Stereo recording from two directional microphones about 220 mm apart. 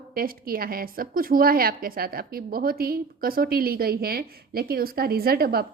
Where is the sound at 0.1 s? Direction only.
40° right (ahead or behind).